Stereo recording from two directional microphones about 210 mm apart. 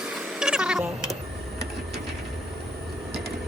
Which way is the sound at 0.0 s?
5° right (ahead or behind).